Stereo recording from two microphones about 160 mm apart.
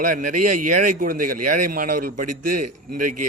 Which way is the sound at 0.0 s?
55° right (ahead or behind).